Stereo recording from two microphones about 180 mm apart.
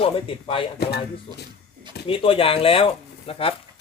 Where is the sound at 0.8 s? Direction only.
65° left (ahead or behind).